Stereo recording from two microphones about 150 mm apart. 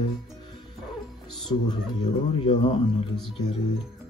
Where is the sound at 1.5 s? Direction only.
30° left (ahead or behind).